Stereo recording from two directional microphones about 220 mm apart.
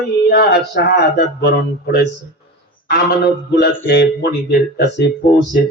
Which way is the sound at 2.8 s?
45° left (ahead or behind).